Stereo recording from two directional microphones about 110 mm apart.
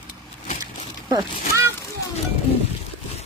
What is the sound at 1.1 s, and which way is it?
Speech, 30° right (ahead or behind).